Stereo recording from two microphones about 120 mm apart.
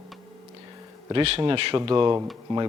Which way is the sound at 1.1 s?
50° right (ahead or behind).